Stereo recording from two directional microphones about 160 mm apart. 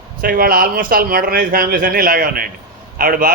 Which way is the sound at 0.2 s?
65° right (ahead or behind).